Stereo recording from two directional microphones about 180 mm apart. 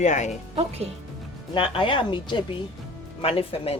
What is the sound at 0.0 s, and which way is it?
Speech, 40° left (ahead or behind).